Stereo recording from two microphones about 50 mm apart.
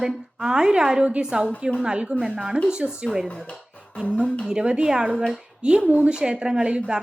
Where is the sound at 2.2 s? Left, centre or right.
Centre.